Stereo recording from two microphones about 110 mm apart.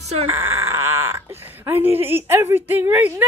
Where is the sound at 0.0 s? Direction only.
85° right.